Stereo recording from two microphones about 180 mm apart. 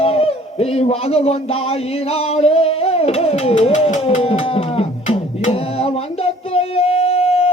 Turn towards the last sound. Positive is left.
turn(degrees=35)  # may be behind; listen again after turning